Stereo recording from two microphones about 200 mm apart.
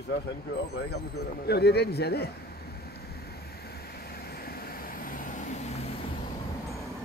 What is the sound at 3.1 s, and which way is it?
Vehicle, 50° left (ahead or behind).